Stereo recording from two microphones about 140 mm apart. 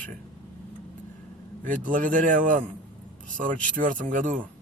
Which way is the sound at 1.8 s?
70° right (ahead or behind).